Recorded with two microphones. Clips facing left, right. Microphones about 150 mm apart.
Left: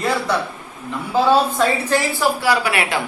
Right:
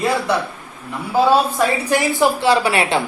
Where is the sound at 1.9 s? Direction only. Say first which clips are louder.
Right 2 dB; 15° right (ahead or behind).